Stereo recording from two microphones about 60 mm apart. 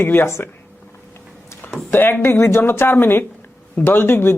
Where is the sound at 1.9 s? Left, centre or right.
Left.